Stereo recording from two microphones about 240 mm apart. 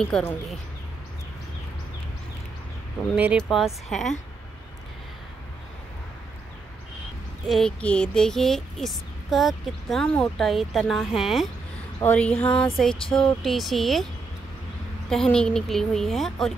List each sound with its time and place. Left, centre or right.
0.1 s speech: centre
3.2 s speech: centre
7.4 s speech: centre
15.0 s speech: centre